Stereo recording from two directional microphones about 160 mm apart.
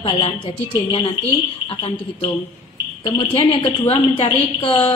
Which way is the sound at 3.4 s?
35° left (ahead or behind).